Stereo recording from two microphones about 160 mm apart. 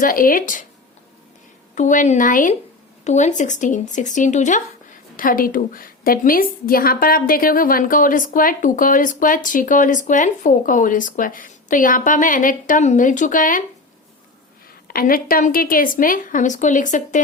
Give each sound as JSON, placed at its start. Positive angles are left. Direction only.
{"t": 0.0, "sound": "speech", "side_deg": 60}
{"t": 1.7, "sound": "a woman's voice", "side_deg": 50}
{"t": 14.8, "sound": "speech", "side_deg": 65}